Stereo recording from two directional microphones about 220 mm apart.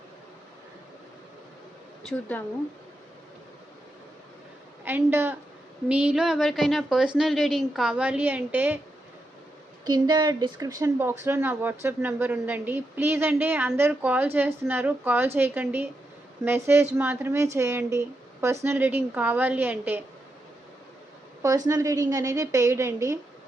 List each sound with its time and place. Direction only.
2.3 s speech: 5° left (ahead or behind)
4.9 s a woman's voice: 10° right (ahead or behind)
9.8 s speech: 20° right (ahead or behind)
21.4 s speech: 15° right (ahead or behind)